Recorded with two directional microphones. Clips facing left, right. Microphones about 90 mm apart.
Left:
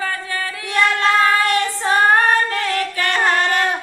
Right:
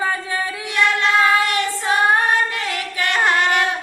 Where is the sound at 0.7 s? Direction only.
40° left (ahead or behind).